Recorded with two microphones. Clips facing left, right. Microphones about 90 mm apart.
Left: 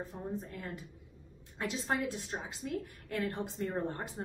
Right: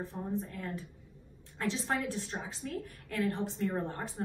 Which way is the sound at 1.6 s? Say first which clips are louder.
Right 1 dB; 20° left (ahead or behind).